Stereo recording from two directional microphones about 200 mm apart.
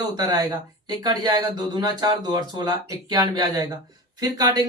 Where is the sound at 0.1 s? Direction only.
20° right (ahead or behind).